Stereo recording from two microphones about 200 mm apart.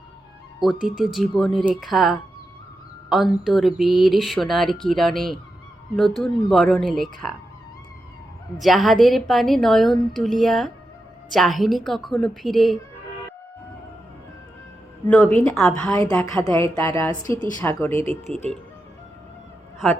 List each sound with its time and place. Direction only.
0.6 s a woman's voice: centre (ahead or behind)
8.5 s a woman's voice: centre (ahead or behind)
15.0 s a woman's voice: 5° left (ahead or behind)
16.4 s a woman's voice: 15° left (ahead or behind)